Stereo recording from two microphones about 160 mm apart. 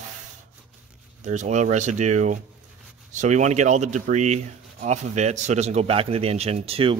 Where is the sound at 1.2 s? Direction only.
50° right (ahead or behind).